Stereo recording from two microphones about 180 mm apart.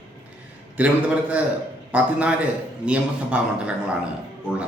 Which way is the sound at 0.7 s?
5° right (ahead or behind).